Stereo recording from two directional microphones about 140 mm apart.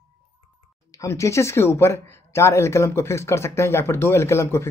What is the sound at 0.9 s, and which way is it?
Speech, 20° left (ahead or behind).